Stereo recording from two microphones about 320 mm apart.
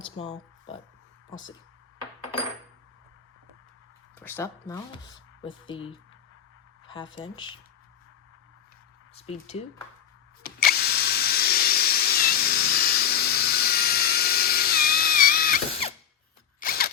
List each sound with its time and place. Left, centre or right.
0.0 s speech: left
4.2 s speech: centre
6.8 s a sound: centre
7.2 s speech: centre
9.3 s speech: centre
10.4 s drill: left
16.6 s a sound: left